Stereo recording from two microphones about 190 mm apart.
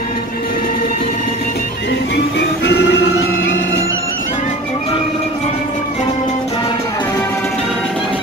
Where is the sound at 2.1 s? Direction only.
60° left (ahead or behind).